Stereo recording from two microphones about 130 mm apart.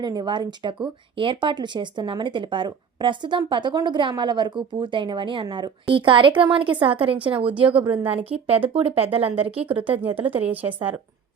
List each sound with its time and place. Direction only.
0.0 s speech: 35° right (ahead or behind)
7.3 s speech: 10° right (ahead or behind)
7.9 s a woman's voice: 45° right (ahead or behind)
9.8 s speech: 15° right (ahead or behind)